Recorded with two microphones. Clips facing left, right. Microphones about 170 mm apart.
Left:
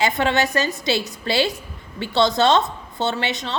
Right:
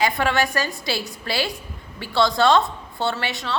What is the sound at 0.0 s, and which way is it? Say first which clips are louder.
A woman's voice: left 1 dB; 20° left (ahead or behind).